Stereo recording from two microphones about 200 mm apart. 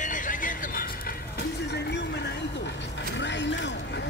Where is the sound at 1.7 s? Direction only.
55° left (ahead or behind).